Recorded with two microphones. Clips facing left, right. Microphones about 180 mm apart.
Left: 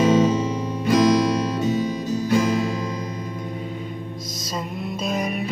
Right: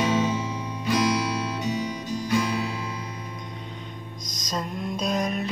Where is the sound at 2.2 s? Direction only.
45° left (ahead or behind).